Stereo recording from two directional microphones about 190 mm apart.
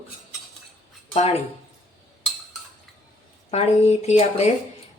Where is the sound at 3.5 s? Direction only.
35° left (ahead or behind).